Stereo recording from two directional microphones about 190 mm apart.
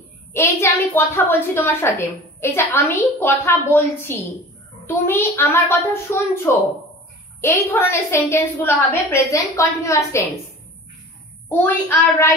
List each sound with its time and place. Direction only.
0.3 s a woman's voice: 15° left (ahead or behind)
11.4 s a woman's voice: 10° left (ahead or behind)